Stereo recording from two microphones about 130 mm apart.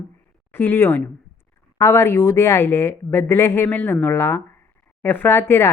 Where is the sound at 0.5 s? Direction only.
15° left (ahead or behind).